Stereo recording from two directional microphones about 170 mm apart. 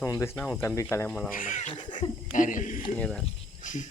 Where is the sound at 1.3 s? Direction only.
50° left (ahead or behind).